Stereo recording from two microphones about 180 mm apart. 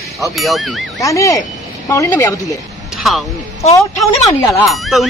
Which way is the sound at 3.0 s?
Centre (ahead or behind).